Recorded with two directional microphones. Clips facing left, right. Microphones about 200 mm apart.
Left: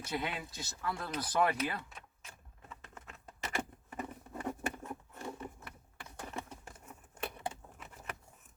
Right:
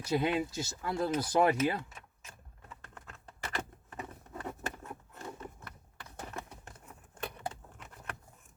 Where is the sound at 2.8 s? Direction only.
5° left (ahead or behind).